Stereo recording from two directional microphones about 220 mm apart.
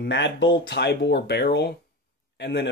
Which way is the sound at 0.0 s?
55° left (ahead or behind).